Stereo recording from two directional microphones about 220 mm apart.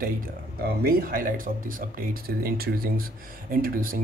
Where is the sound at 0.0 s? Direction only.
40° right (ahead or behind).